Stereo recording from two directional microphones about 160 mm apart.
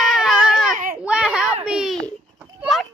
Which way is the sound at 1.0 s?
5° right (ahead or behind).